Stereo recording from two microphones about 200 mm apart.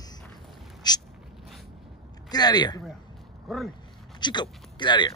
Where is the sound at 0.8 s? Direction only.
20° left (ahead or behind).